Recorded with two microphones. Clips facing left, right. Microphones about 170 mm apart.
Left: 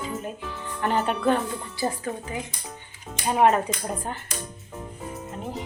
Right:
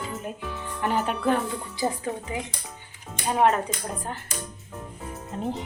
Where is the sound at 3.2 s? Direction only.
Centre (ahead or behind).